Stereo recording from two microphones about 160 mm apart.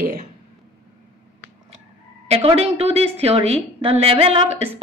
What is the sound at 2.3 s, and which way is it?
A woman's voice, 40° right (ahead or behind).